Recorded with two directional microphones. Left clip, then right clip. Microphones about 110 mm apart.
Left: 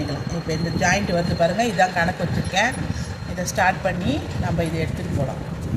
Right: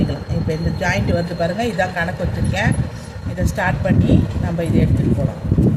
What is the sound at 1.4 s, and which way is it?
Speech, 15° right (ahead or behind).